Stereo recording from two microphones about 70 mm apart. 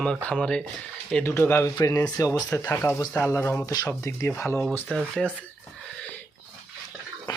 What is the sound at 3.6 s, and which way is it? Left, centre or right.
Speech, left.